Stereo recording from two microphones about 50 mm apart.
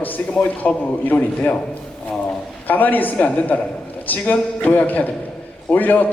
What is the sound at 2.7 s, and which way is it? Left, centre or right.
A man's voice, left.